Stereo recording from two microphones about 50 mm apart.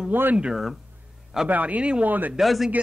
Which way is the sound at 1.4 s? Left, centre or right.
Right.